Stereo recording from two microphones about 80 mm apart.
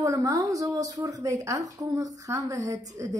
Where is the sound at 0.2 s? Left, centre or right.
Right.